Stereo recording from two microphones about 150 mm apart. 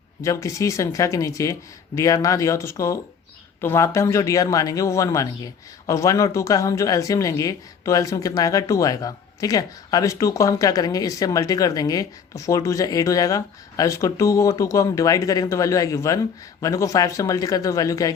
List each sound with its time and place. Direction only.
0.2 s speech: 20° left (ahead or behind)